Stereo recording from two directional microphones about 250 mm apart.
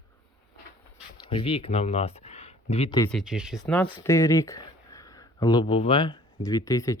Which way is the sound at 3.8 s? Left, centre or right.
Centre.